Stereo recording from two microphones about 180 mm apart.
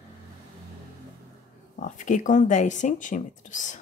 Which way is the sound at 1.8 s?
45° left (ahead or behind).